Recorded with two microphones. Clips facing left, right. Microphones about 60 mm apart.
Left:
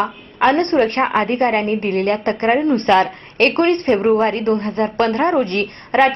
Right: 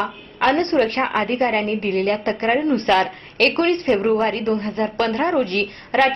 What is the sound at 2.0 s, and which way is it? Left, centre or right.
Speech, centre.